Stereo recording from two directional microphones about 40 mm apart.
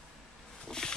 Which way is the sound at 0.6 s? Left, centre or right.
Centre.